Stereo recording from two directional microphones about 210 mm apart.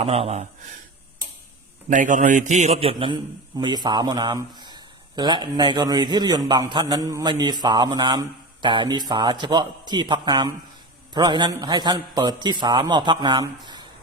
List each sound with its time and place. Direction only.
0.0 s a man's voice: 30° right (ahead or behind)
1.9 s a man's voice: 35° right (ahead or behind); by 13.8 s 20° right (ahead or behind)